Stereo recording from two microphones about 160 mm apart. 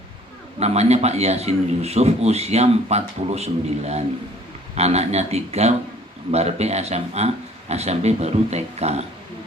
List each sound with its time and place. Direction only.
0.6 s a man's voice: 40° right (ahead or behind)